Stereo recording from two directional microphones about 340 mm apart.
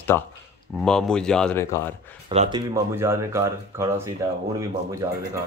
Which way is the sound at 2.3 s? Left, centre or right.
Centre.